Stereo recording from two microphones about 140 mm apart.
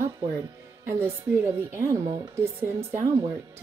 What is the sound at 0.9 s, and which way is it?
Speech, 15° right (ahead or behind).